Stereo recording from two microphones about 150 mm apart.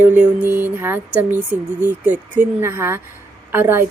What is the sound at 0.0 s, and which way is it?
Speech, 10° right (ahead or behind).